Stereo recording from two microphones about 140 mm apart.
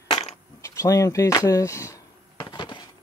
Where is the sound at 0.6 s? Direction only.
20° left (ahead or behind).